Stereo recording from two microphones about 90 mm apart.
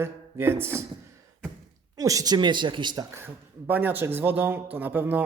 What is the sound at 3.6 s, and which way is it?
A man's voice, 20° right (ahead or behind).